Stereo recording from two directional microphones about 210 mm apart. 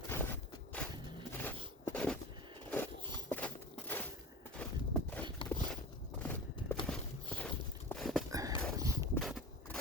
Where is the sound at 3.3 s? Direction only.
5° left (ahead or behind).